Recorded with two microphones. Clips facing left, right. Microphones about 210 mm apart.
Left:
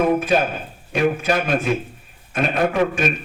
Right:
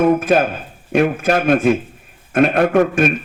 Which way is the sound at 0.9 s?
55° right (ahead or behind).